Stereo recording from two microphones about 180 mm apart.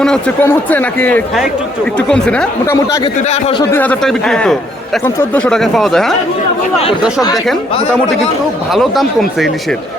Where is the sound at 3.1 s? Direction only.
40° left (ahead or behind).